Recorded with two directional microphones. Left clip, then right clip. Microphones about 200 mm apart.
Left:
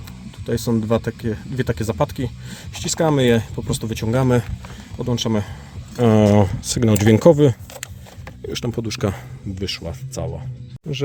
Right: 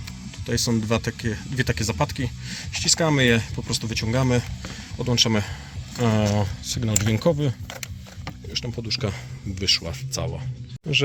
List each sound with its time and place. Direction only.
0.4 s speech: 25° left (ahead or behind); by 4.4 s 45° left (ahead or behind)
4.9 s speech: 20° left (ahead or behind)
6.0 s speech: 35° left (ahead or behind); by 7.5 s 50° left (ahead or behind)
8.5 s speech: 50° left (ahead or behind)
9.6 s speech: 20° left (ahead or behind)